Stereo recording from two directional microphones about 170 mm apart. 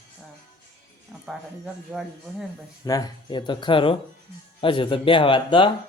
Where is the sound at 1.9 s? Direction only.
5° right (ahead or behind).